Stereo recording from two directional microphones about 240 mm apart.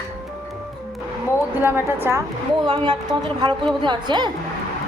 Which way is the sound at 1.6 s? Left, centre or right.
Centre.